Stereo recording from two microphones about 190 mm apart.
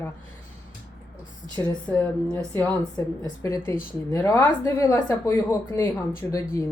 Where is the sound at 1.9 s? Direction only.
5° left (ahead or behind).